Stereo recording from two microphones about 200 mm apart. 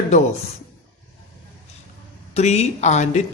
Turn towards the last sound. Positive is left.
turn(degrees=35)  # may be behind; listen again after turning